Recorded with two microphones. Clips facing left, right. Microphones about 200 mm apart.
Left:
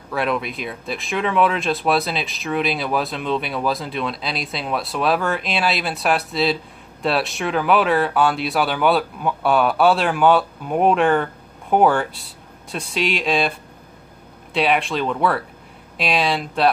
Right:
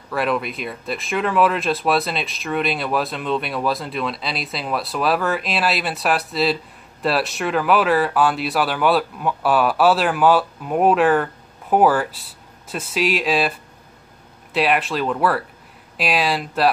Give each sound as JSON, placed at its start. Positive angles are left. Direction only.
{"t": 0.1, "sound": "speech", "side_deg": 0}